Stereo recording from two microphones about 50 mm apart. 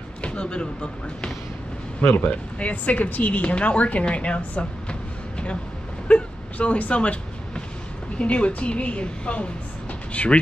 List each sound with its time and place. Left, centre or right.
0.2 s a woman's voice: left
2.2 s a woman's voice: left
6.0 s a sound: left
8.2 s a woman's voice: left